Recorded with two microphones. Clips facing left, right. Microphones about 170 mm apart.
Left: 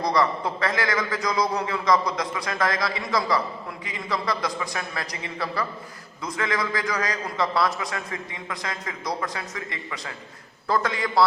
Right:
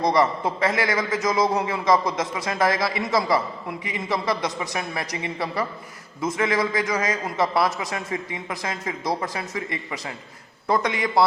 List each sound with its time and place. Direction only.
0.0 s a man's voice: 25° right (ahead or behind)
10.7 s a man's voice: 20° right (ahead or behind)